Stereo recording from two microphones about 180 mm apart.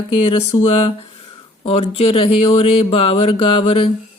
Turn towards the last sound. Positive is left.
turn(degrees=30)  # may be behind; listen again after turning